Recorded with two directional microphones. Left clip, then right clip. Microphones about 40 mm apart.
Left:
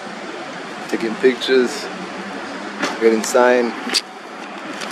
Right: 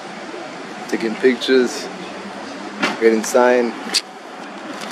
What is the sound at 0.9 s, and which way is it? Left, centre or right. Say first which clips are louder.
Speech: even; centre.